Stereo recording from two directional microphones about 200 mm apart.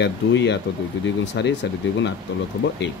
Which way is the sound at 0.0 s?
60° left (ahead or behind).